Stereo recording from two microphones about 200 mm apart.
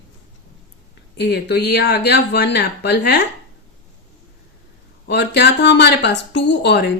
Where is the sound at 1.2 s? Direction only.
55° left (ahead or behind).